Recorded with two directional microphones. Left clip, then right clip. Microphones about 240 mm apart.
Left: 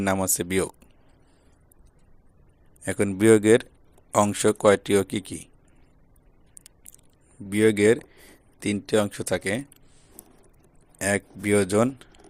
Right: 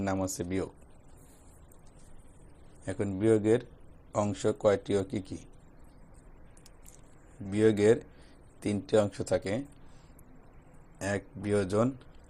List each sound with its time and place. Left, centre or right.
0.0 s speech: left
2.8 s a man's voice: left
4.4 s speech: left
7.5 s a man's voice: left
10.9 s speech: left